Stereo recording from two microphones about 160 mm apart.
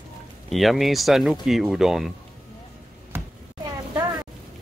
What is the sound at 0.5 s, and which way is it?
Speech, centre (ahead or behind).